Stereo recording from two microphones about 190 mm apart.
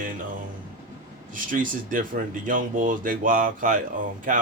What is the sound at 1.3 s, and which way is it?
Speech, 45° right (ahead or behind).